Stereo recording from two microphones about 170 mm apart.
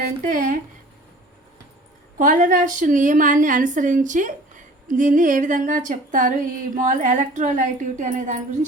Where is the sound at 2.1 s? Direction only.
50° right (ahead or behind).